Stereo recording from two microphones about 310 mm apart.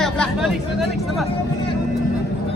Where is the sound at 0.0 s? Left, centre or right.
Centre.